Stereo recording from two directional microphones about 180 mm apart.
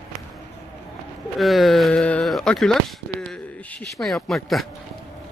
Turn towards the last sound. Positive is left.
turn(degrees=0)  # may be behind; listen again after turning